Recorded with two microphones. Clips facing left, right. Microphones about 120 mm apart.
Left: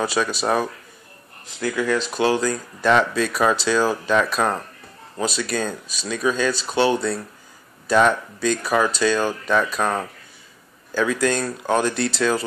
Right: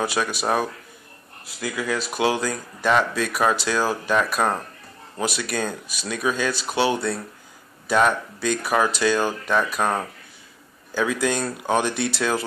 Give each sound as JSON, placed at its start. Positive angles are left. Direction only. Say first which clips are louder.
{"t": 0.0, "sound": "speech", "louder": "left 2 dB", "side_deg": -10}